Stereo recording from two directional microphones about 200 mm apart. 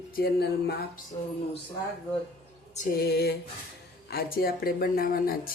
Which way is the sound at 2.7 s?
45° left (ahead or behind).